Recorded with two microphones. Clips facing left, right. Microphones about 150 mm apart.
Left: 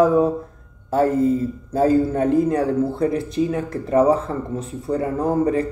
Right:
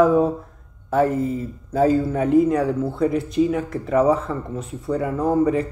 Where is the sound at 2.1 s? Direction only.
35° left (ahead or behind).